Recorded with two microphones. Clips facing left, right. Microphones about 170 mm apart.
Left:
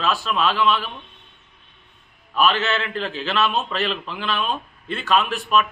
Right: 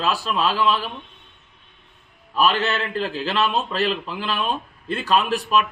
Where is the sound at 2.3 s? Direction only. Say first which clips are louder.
Even; 35° right (ahead or behind).